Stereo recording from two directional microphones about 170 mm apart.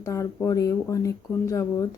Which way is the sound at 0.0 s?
15° left (ahead or behind).